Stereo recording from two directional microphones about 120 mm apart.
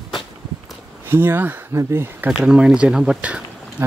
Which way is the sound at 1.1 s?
20° right (ahead or behind).